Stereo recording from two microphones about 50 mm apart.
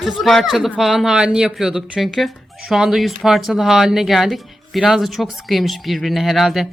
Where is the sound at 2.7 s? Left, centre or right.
Centre.